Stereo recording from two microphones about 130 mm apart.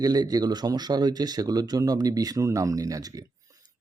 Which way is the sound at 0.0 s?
30° right (ahead or behind).